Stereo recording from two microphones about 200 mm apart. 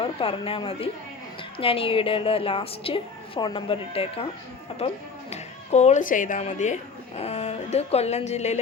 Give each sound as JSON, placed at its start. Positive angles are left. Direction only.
{"t": 0.0, "sound": "a woman's voice", "side_deg": 25}
{"t": 5.3, "sound": "speech", "side_deg": 35}